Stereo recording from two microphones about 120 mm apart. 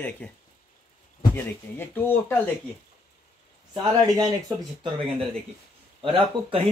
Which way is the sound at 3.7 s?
35° right (ahead or behind).